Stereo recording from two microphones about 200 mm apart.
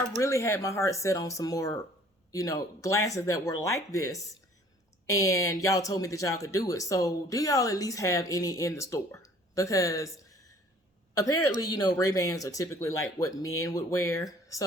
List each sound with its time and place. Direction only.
0.2 s speech: 15° left (ahead or behind)
5.3 s speech: 15° left (ahead or behind)